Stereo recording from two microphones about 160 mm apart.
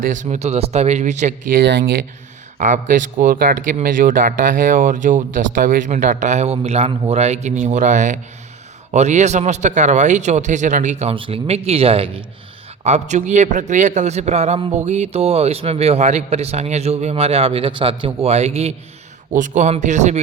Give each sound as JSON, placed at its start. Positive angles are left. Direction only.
{"t": 0.0, "sound": "speech", "side_deg": -50}
{"t": 12.8, "sound": "a man's voice", "side_deg": -45}
{"t": 19.3, "sound": "speech", "side_deg": -50}